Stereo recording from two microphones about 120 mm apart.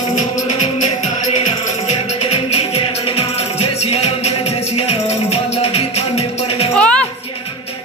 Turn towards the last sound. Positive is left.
turn(degrees=10)  # may be behind; listen again after turning